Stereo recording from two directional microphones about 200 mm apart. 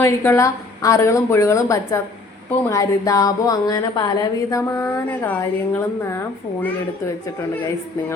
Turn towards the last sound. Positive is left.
turn(degrees=10)  # may be behind; listen again after turning